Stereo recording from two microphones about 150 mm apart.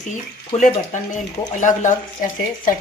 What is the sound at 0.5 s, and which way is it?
Speech, 45° left (ahead or behind).